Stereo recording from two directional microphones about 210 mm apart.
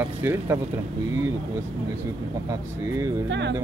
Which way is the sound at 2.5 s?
15° right (ahead or behind).